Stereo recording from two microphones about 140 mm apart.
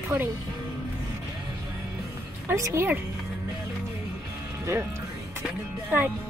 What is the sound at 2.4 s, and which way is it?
Speech, 20° right (ahead or behind).